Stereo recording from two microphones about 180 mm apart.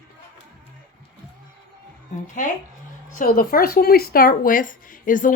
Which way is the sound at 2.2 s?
45° left (ahead or behind).